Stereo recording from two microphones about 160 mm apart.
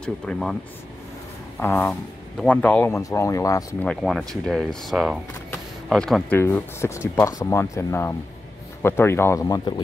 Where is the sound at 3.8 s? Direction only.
Centre (ahead or behind).